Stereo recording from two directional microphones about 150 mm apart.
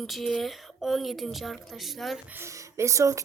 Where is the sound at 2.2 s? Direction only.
15° right (ahead or behind).